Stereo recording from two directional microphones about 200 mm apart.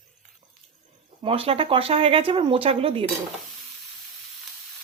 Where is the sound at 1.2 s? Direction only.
30° right (ahead or behind).